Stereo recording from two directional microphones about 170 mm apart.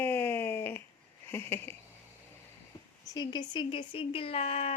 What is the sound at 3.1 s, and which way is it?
Speech, 25° left (ahead or behind).